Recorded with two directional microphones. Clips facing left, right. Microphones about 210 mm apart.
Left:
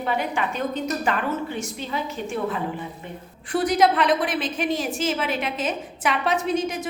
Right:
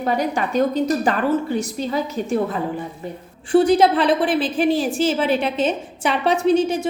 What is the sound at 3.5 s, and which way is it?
A woman's voice, 30° right (ahead or behind).